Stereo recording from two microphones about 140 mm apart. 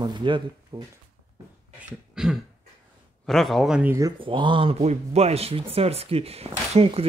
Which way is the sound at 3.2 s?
Centre (ahead or behind).